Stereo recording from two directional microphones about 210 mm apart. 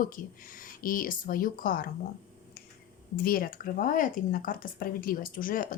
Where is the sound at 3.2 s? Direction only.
45° left (ahead or behind).